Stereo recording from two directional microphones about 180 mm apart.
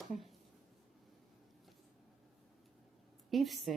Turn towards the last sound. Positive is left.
turn(degrees=0)  # may be behind; listen again after turning